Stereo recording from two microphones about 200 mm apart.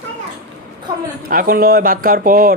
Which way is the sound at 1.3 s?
45° right (ahead or behind).